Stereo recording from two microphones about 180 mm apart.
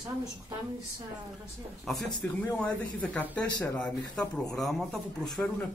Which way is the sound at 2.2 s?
15° left (ahead or behind).